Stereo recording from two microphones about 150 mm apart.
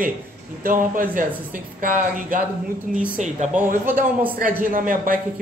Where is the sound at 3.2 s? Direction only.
50° right (ahead or behind).